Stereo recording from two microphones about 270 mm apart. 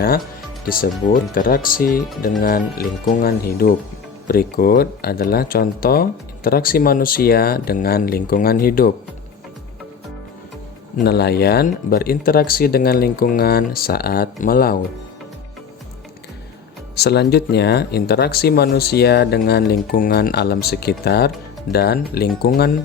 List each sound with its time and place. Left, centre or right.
0.6 s speech: left
11.0 s speech: left
16.9 s speech: left